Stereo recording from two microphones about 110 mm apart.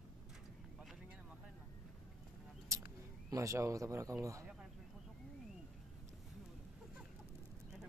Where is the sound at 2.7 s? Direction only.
30° right (ahead or behind).